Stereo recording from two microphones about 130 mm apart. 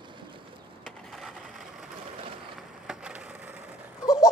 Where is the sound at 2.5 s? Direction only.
5° right (ahead or behind).